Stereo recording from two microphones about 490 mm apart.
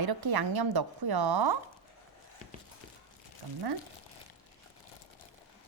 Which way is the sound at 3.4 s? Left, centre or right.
Right.